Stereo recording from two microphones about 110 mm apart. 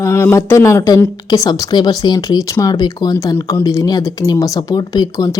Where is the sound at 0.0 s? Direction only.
25° left (ahead or behind).